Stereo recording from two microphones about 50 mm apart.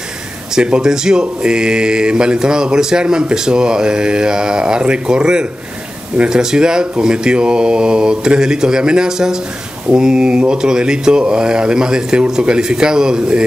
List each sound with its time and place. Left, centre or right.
0.6 s speech: centre